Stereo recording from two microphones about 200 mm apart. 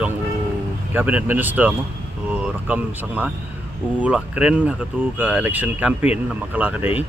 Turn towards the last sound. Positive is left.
turn(degrees=-5)  # may be behind; listen again after turning